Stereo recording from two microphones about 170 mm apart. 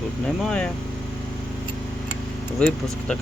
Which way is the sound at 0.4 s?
5° left (ahead or behind).